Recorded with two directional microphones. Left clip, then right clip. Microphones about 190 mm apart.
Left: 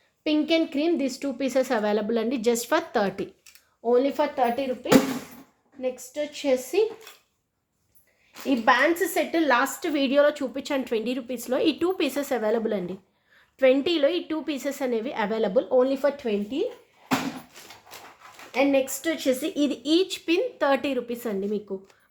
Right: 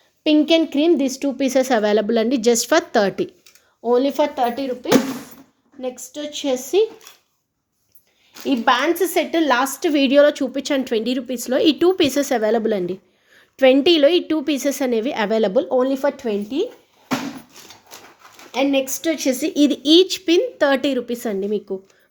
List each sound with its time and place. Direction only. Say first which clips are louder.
0.3 s a woman's voice: right 7 dB; 35° right (ahead or behind)
6.4 s speech: right 5 dB; 45° right (ahead or behind)
8.4 s a woman's voice: right 3 dB; 40° right (ahead or behind)
18.5 s a woman's voice: right 3 dB; 45° right (ahead or behind)